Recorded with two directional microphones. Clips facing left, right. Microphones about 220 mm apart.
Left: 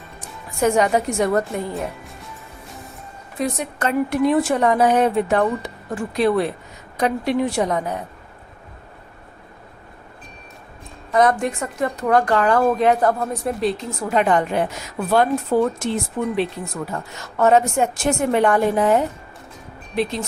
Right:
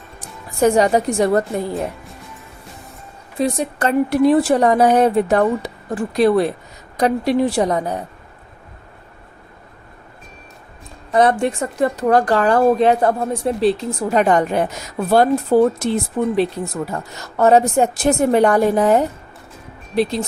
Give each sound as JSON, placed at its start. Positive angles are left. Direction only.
{"t": 0.6, "sound": "speech", "side_deg": -35}
{"t": 3.3, "sound": "speech", "side_deg": -30}
{"t": 11.1, "sound": "speech", "side_deg": -30}
{"t": 17.3, "sound": "speech", "side_deg": -35}